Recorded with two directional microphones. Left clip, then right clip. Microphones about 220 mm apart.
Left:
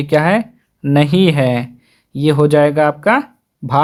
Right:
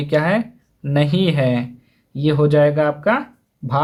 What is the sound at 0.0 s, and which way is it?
Speech, 35° left (ahead or behind).